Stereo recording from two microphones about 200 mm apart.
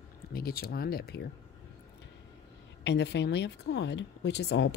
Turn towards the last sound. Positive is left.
turn(degrees=60)  # may be behind; listen again after turning